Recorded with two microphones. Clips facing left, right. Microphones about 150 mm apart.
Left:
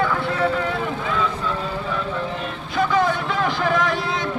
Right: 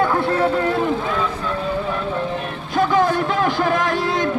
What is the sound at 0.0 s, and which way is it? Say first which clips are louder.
Vehicle: right 4 dB; 40° right (ahead or behind).